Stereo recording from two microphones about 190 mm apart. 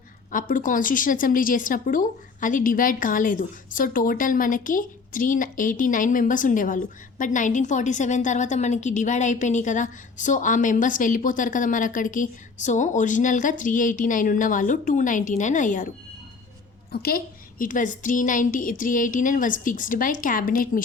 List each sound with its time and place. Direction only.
0.3 s a woman's voice: 45° left (ahead or behind)
16.9 s a woman's voice: 55° left (ahead or behind)